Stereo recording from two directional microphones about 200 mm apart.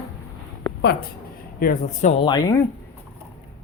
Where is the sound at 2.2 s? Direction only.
20° left (ahead or behind).